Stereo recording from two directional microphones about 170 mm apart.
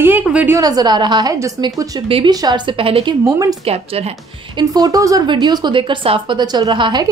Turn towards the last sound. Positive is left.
turn(degrees=-25)  # may be behind; listen again after turning